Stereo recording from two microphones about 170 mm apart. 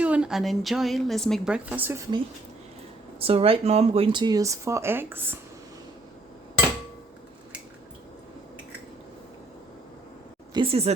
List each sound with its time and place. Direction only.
0.0 s a woman's voice: 5° right (ahead or behind)
3.2 s speech: 35° right (ahead or behind); by 5.4 s 10° right (ahead or behind)
10.5 s a sound: 30° right (ahead or behind)